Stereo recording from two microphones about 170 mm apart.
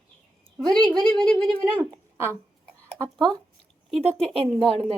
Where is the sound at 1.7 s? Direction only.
15° right (ahead or behind).